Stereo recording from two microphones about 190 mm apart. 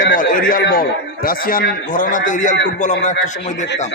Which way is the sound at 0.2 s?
45° left (ahead or behind).